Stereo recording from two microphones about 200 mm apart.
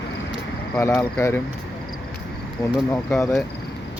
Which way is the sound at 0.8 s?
10° left (ahead or behind).